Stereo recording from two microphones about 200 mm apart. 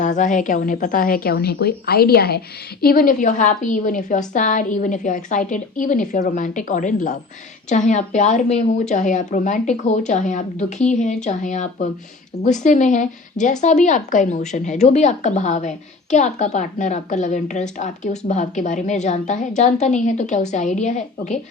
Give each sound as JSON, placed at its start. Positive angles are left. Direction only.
{"t": 0.0, "sound": "a woman's voice", "side_deg": 40}